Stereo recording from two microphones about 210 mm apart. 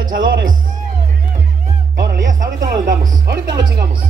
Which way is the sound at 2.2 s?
40° right (ahead or behind).